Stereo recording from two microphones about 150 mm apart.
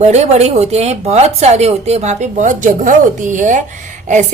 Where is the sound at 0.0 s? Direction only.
45° right (ahead or behind).